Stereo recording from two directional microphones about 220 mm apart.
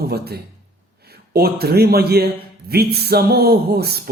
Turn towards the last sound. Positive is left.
turn(degrees=-45)  # may be behind; listen again after turning